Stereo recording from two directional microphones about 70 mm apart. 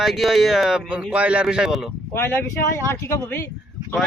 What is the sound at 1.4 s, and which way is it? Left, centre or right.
Speech, centre.